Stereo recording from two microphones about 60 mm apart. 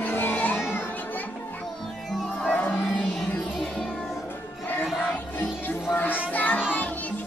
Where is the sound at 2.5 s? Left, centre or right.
Left.